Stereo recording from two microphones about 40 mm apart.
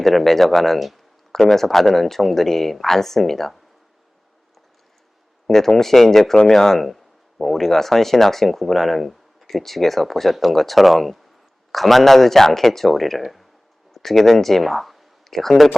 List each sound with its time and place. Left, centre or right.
0.0 s speech: centre
5.5 s speech: centre